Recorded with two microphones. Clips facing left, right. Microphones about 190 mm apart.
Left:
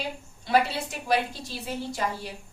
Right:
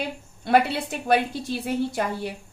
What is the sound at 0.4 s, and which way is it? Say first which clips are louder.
A woman's voice: right 4 dB; 55° right (ahead or behind).